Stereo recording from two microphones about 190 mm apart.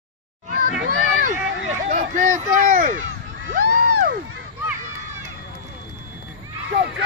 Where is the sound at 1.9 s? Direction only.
40° right (ahead or behind).